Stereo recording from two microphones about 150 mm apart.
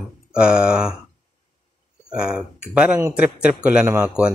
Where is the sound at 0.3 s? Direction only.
5° right (ahead or behind).